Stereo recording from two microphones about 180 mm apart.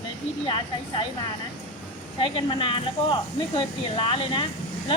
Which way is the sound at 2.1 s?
30° left (ahead or behind).